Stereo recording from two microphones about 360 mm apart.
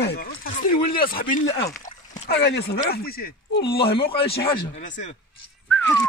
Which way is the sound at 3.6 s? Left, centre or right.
Centre.